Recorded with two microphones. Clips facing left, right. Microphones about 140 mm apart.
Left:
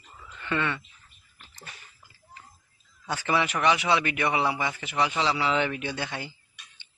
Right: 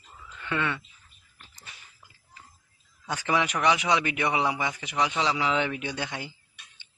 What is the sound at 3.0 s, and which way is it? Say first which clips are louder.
A man's voice: even; 15° right (ahead or behind).